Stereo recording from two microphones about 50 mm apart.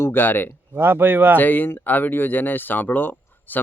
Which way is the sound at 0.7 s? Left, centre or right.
Right.